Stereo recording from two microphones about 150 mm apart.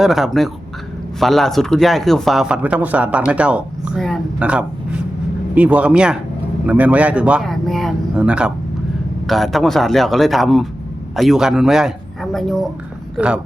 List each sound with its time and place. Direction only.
0.0 s speech: centre (ahead or behind)